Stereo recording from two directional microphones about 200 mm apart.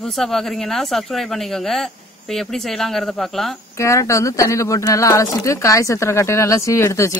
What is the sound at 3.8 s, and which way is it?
Speech, 15° left (ahead or behind).